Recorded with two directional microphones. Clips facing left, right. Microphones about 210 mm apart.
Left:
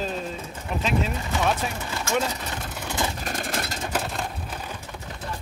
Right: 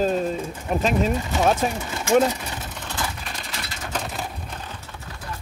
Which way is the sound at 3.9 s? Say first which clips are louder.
Left 1 dB; 5° left (ahead or behind).